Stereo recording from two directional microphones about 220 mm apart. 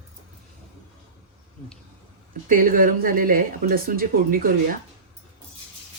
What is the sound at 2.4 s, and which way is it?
Speech, 40° right (ahead or behind).